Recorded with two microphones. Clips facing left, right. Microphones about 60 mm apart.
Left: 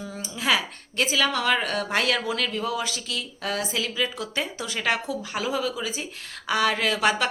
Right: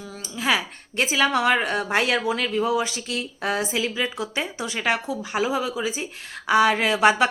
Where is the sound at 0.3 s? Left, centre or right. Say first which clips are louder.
Right 1 dB; centre.